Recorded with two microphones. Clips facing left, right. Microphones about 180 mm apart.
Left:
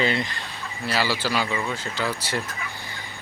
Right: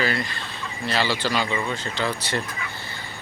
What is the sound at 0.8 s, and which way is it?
Speech, 5° left (ahead or behind).